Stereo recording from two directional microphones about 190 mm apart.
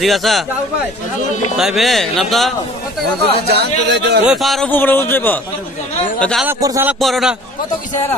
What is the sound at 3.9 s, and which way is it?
Speech, 60° right (ahead or behind).